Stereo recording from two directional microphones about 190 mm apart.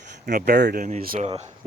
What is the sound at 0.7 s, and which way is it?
Speech, 45° right (ahead or behind).